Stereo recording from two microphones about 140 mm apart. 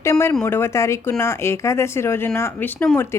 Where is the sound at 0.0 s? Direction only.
20° left (ahead or behind).